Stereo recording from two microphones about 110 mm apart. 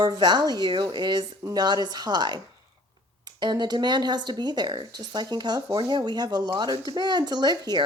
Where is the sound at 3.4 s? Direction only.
40° right (ahead or behind).